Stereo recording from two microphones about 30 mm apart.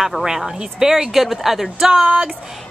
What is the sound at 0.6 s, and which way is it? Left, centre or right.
Speech, centre.